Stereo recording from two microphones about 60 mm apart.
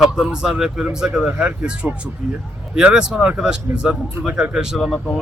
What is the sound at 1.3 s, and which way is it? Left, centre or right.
A man's voice, centre.